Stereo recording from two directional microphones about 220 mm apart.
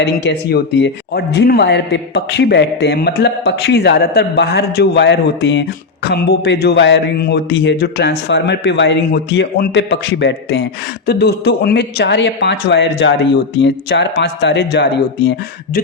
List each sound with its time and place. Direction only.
0.0 s speech: 50° left (ahead or behind)